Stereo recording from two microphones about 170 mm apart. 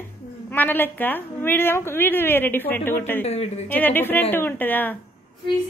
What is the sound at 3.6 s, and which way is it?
A woman's voice, 10° left (ahead or behind).